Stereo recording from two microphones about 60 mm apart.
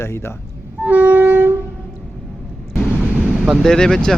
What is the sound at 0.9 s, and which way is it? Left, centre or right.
Train, right.